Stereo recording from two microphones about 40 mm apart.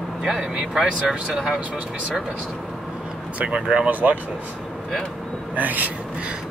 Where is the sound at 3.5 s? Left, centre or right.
Centre.